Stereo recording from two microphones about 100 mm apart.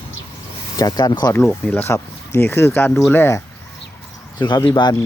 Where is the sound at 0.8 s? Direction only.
40° left (ahead or behind).